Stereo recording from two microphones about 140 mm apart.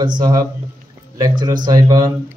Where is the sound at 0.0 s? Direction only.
30° right (ahead or behind).